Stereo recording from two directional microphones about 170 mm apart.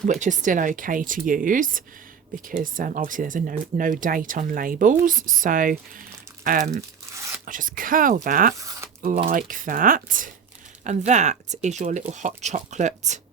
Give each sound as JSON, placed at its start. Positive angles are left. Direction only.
{"t": 0.1, "sound": "speech", "side_deg": -45}